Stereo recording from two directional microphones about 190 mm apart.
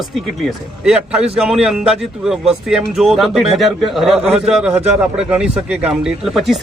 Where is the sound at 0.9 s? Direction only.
5° right (ahead or behind).